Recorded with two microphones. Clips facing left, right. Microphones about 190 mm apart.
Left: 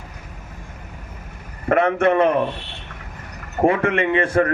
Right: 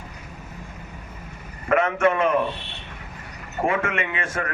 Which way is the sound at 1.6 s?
35° left (ahead or behind).